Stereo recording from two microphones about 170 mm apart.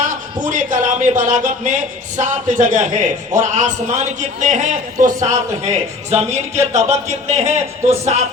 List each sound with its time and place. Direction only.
0.0 s speech: 50° right (ahead or behind)